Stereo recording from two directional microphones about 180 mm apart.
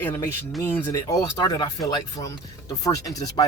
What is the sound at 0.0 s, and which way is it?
A man's voice, 10° left (ahead or behind).